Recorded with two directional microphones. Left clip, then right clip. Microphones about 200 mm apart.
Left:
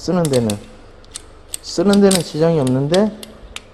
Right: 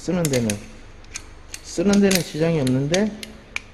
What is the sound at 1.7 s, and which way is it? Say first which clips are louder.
Speech: left 5 dB; 20° left (ahead or behind).